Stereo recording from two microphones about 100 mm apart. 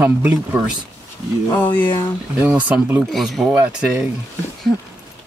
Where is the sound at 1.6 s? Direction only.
15° left (ahead or behind).